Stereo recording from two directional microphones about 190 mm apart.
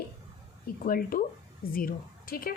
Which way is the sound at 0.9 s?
50° left (ahead or behind).